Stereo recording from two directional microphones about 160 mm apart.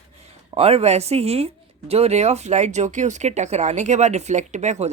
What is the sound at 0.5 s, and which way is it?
Speech, 40° right (ahead or behind).